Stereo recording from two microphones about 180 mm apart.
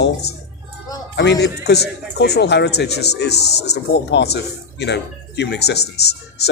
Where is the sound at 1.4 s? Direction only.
65° left (ahead or behind).